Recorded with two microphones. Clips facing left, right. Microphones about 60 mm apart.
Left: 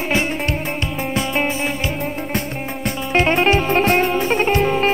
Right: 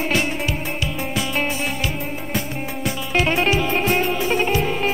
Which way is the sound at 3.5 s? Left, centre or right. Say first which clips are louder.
Left 4 dB; left.